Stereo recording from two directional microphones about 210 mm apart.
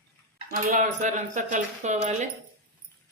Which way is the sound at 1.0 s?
35° right (ahead or behind).